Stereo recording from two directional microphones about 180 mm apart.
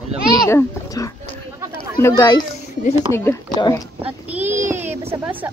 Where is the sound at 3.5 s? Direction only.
25° left (ahead or behind).